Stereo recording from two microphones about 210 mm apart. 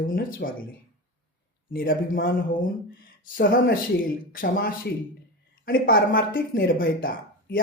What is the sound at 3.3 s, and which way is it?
Speech, 40° left (ahead or behind).